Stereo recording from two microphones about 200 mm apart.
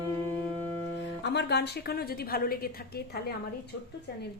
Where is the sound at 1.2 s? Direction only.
55° left (ahead or behind).